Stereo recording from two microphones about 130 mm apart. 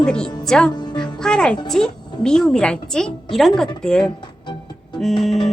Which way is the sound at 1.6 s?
5° left (ahead or behind).